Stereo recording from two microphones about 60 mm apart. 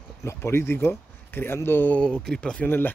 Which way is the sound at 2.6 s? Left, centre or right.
Left.